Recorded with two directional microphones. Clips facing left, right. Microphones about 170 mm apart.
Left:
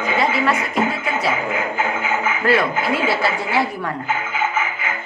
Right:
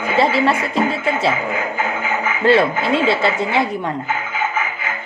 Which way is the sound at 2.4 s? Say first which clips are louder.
Right 5 dB; 25° right (ahead or behind).